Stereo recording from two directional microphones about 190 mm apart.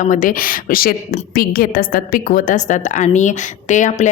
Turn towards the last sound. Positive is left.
turn(degrees=40)  # may be behind; listen again after turning